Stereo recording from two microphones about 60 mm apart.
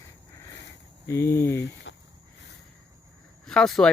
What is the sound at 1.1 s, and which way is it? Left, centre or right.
Speech, left.